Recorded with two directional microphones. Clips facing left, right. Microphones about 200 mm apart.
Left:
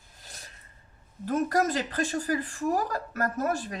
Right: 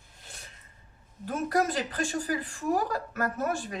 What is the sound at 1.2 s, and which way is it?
A woman's voice, 40° left (ahead or behind).